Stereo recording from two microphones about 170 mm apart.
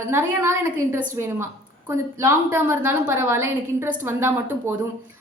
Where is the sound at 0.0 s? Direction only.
15° right (ahead or behind).